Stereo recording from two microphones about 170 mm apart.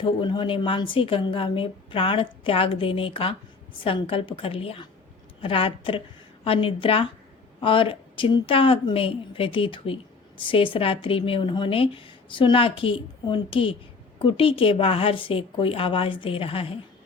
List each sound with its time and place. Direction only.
0.0 s a woman's voice: 30° left (ahead or behind)